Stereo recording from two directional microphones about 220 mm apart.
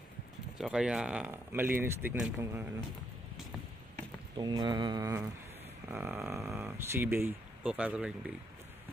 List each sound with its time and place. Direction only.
0.6 s speech: centre (ahead or behind)
4.4 s mantra: 20° right (ahead or behind)
5.9 s speech: 10° right (ahead or behind)